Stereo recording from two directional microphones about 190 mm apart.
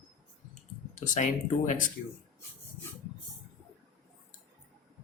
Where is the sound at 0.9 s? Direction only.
40° left (ahead or behind).